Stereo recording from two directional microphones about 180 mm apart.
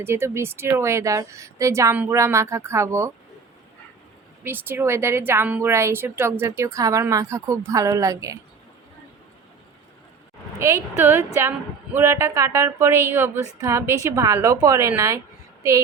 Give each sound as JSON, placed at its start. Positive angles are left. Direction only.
{"t": 0.0, "sound": "a woman's voice", "side_deg": -15}
{"t": 4.4, "sound": "a woman's voice", "side_deg": -10}
{"t": 10.6, "sound": "a woman's voice", "side_deg": -15}